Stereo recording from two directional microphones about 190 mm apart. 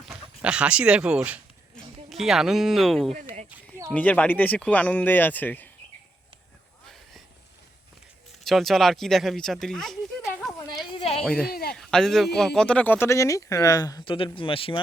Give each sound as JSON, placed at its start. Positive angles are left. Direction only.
{"t": 0.1, "sound": "speech", "side_deg": -5}
{"t": 3.2, "sound": "a sound", "side_deg": -40}
{"t": 3.5, "sound": "a sound", "side_deg": -15}
{"t": 3.9, "sound": "speech", "side_deg": 5}
{"t": 6.8, "sound": "a sound", "side_deg": 0}
{"t": 8.4, "sound": "speech", "side_deg": 0}
{"t": 10.9, "sound": "speech", "side_deg": 30}
{"t": 11.2, "sound": "speech", "side_deg": 5}
{"t": 11.5, "sound": "speech", "side_deg": 55}
{"t": 11.8, "sound": "speech", "side_deg": 5}